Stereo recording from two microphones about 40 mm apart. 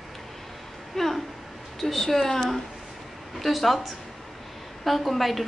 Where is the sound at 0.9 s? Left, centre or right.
Centre.